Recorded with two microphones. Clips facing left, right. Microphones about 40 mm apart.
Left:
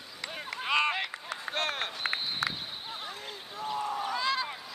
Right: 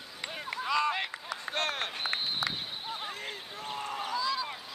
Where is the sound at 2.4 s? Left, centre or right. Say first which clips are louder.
Left 4 dB; left.